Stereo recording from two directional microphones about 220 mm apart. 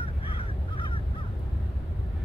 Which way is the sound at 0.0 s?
25° left (ahead or behind).